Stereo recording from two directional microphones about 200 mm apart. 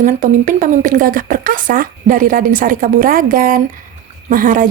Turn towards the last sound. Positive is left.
turn(degrees=-40)  # may be behind; listen again after turning